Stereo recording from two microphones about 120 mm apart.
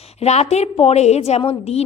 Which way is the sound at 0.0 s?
60° left (ahead or behind).